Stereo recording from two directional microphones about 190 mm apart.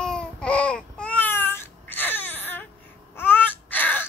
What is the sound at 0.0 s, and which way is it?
Babbling, 5° left (ahead or behind).